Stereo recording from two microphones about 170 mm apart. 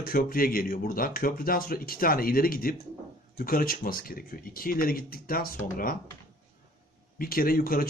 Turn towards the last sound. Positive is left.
turn(degrees=60)  # may be behind; listen again after turning